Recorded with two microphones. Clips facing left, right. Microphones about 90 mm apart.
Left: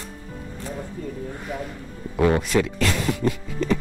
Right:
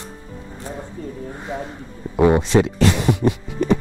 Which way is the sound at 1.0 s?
30° right (ahead or behind).